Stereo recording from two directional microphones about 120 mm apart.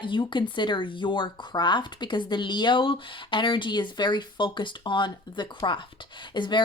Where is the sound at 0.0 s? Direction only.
45° left (ahead or behind).